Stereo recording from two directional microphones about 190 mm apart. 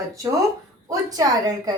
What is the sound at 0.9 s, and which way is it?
Speech, 20° right (ahead or behind).